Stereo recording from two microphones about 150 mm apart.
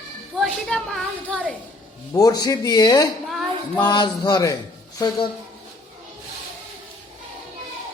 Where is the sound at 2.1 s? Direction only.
25° left (ahead or behind).